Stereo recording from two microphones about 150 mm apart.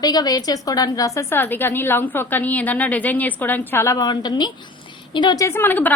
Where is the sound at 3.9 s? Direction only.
30° left (ahead or behind).